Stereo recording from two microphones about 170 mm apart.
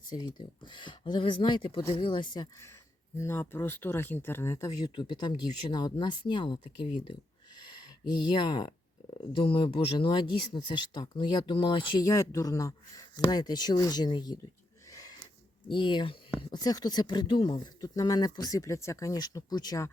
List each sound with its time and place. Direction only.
0.1 s speech: 25° left (ahead or behind)
3.2 s speech: 15° left (ahead or behind)
4.9 s speech: 30° left (ahead or behind)
14.9 s snort: 20° left (ahead or behind)
15.7 s speech: 30° left (ahead or behind)